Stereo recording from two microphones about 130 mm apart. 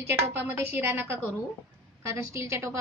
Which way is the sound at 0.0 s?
15° right (ahead or behind).